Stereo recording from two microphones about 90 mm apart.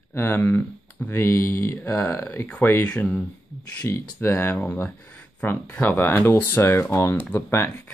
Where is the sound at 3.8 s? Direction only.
30° left (ahead or behind).